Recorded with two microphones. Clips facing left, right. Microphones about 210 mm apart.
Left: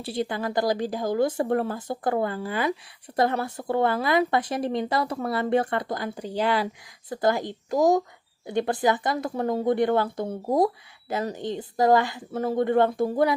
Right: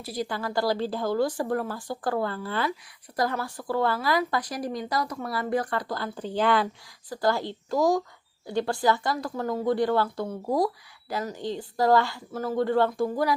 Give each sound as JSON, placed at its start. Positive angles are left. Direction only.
{"t": 0.0, "sound": "speech", "side_deg": 25}
{"t": 7.1, "sound": "speech", "side_deg": 20}